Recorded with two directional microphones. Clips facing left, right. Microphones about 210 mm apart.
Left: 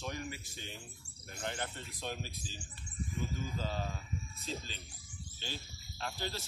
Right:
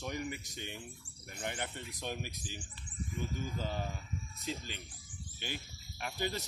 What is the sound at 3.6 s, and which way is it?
Speech, 15° right (ahead or behind).